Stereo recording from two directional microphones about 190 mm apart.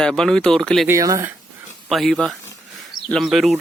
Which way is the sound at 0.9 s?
15° right (ahead or behind).